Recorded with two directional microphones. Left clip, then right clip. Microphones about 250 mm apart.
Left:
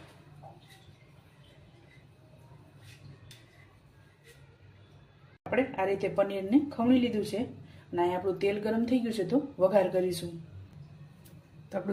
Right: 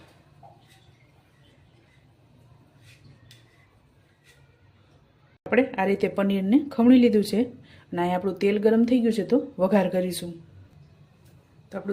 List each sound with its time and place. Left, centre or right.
5.5 s speech: right